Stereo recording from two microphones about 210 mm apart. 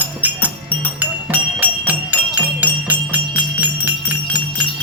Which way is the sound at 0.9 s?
10° right (ahead or behind).